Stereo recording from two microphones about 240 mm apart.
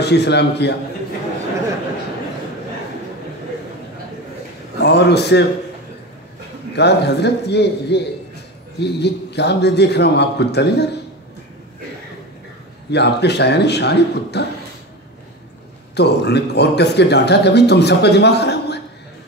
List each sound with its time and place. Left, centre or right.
0.0 s speech: left
4.7 s a man's voice: left
6.7 s speech: left
12.9 s speech: left
15.9 s speech: left